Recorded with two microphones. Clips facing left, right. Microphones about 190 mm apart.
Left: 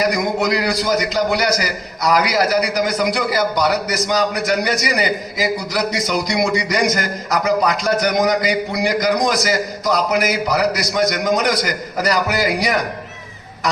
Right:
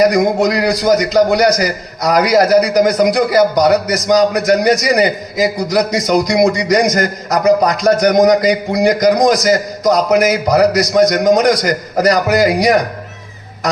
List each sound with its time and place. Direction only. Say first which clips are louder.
0.0 s a man's voice: right 7 dB; 45° right (ahead or behind)